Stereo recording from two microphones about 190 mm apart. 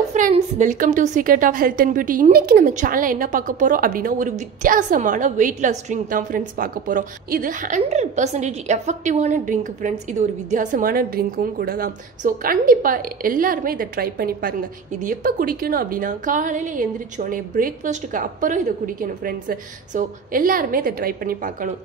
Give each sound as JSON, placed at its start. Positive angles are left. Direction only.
{"t": 0.1, "sound": "a woman's voice", "side_deg": -40}